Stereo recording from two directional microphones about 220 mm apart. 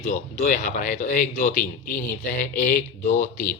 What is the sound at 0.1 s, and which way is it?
A man's voice, 35° left (ahead or behind).